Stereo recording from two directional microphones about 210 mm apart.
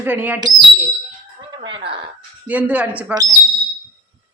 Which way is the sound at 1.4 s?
20° right (ahead or behind).